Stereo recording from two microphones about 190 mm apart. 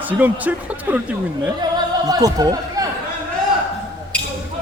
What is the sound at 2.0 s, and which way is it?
Speech, 20° right (ahead or behind).